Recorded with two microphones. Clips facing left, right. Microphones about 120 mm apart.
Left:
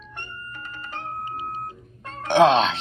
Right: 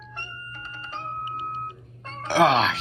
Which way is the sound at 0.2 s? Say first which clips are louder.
Left 3 dB; 50° left (ahead or behind).